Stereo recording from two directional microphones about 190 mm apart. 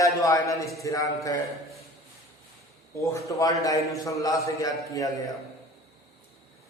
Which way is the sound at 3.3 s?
15° left (ahead or behind).